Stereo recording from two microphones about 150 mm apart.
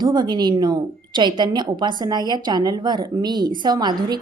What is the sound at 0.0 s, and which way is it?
A woman's voice, 30° right (ahead or behind).